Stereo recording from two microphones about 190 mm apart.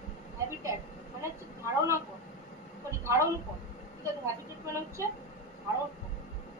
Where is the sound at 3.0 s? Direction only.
15° right (ahead or behind).